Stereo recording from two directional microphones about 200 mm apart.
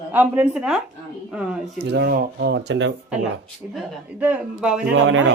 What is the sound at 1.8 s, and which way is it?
Speech, 55° right (ahead or behind).